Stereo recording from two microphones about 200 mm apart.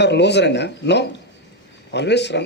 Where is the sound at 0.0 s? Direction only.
60° left (ahead or behind).